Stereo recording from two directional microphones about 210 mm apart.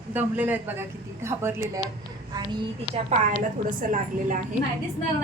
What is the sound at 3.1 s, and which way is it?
A woman's voice, 30° right (ahead or behind).